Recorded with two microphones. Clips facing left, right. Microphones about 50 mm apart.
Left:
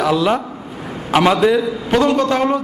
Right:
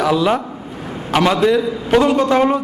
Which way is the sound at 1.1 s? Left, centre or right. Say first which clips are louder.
Left 1 dB; centre.